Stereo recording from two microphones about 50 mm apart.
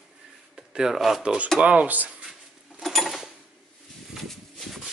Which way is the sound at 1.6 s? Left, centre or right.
Right.